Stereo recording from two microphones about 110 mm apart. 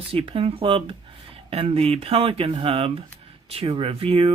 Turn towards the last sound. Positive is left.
turn(degrees=-60)  # may be behind; listen again after turning